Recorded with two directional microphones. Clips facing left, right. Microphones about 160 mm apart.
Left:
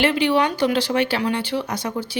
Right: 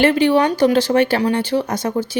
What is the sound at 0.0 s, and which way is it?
Speech, 45° right (ahead or behind).